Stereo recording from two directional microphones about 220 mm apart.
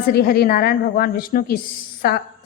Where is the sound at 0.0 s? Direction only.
45° left (ahead or behind).